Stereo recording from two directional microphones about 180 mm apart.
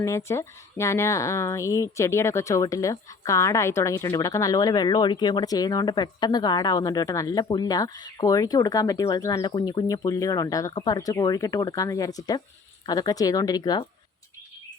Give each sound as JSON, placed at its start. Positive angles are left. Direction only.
{"t": 0.0, "sound": "speech", "side_deg": 15}